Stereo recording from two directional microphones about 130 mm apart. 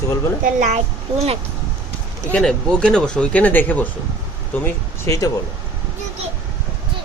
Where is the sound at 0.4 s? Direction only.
90° right.